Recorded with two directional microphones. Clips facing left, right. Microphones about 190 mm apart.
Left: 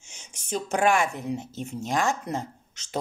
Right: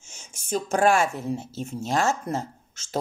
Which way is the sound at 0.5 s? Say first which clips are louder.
Right 2 dB; 40° right (ahead or behind).